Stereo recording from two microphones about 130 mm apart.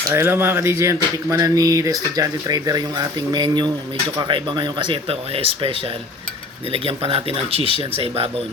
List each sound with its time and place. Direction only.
0.1 s speech: 15° right (ahead or behind); by 5.7 s 45° right (ahead or behind)
6.7 s speech: 45° right (ahead or behind)